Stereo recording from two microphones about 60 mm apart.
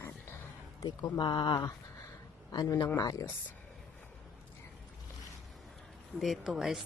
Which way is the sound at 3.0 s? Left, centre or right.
Left.